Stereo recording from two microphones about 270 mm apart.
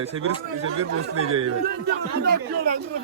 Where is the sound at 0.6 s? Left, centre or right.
Right.